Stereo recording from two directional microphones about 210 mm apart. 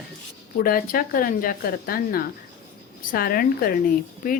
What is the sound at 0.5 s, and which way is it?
A woman's voice, 45° left (ahead or behind).